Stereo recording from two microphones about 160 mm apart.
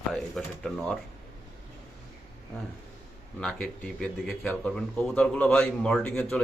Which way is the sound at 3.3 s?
5° left (ahead or behind).